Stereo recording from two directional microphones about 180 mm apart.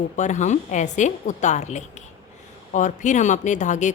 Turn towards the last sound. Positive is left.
turn(degrees=40)  # may be behind; listen again after turning